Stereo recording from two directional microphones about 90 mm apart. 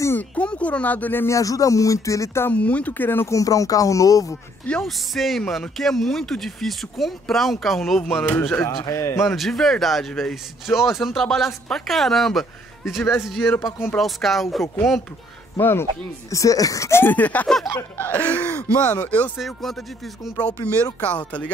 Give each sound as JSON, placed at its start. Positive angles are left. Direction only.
{"t": 0.2, "sound": "speech", "side_deg": 15}
{"t": 1.2, "sound": "speech", "side_deg": 35}
{"t": 2.5, "sound": "speech", "side_deg": 15}
{"t": 3.3, "sound": "speech", "side_deg": 40}
{"t": 4.6, "sound": "speech", "side_deg": 5}
{"t": 8.3, "sound": "speech", "side_deg": 20}
{"t": 8.6, "sound": "speech", "side_deg": 35}
{"t": 9.2, "sound": "speech", "side_deg": 0}
{"t": 15.6, "sound": "speech", "side_deg": 25}
{"t": 17.0, "sound": "speech", "side_deg": 20}
{"t": 19.3, "sound": "speech", "side_deg": 0}
{"t": 20.3, "sound": "speech", "side_deg": 15}